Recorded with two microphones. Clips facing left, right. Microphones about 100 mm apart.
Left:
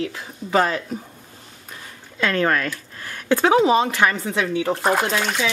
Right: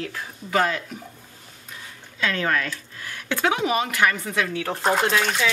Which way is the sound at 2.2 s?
45° left (ahead or behind).